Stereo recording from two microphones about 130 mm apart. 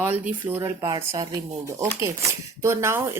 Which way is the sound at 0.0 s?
15° right (ahead or behind).